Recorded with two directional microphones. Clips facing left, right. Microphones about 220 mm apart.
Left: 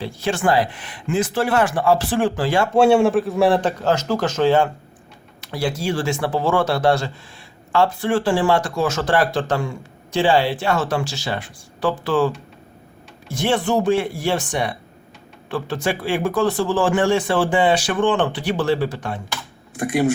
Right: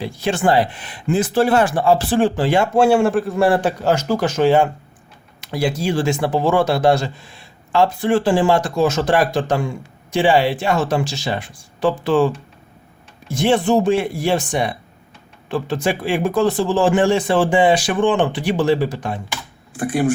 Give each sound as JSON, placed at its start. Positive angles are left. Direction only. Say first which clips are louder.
{"t": 0.0, "sound": "speech", "louder": "right 2 dB", "side_deg": -20}
{"t": 2.7, "sound": "a man's voice", "louder": "left 2 dB", "side_deg": 0}
{"t": 13.4, "sound": "a man's voice", "louder": "right 3 dB", "side_deg": -20}